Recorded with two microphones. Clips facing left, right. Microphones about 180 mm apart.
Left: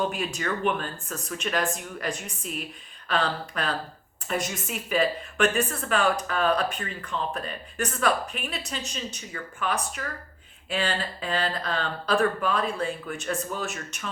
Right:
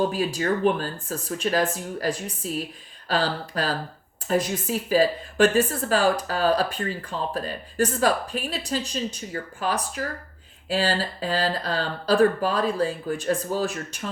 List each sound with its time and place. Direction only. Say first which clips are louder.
0.0 s speech: right 5 dB; 35° right (ahead or behind)